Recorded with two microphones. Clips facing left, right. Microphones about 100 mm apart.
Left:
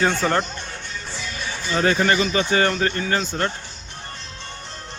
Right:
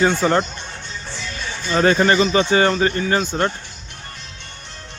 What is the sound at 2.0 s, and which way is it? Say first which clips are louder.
Speech: right 4 dB; 30° right (ahead or behind).